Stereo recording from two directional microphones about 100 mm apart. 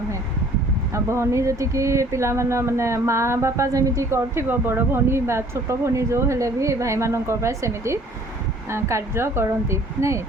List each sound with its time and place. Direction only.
0.9 s speech: 30° right (ahead or behind)